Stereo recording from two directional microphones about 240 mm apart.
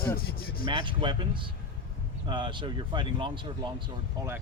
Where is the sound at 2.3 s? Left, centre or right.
Centre.